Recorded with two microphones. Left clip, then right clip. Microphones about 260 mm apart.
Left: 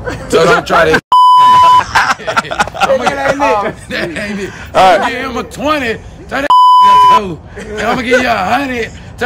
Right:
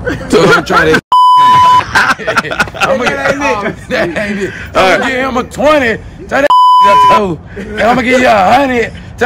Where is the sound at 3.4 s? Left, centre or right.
Left.